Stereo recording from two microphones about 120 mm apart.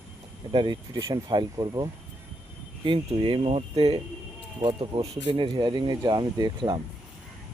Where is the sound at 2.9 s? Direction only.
45° right (ahead or behind).